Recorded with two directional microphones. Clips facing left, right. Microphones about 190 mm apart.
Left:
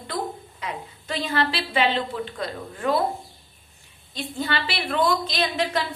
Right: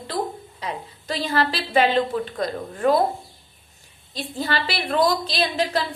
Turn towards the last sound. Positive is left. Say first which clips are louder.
# right 2 dB
turn(degrees=-35)  # may be behind; listen again after turning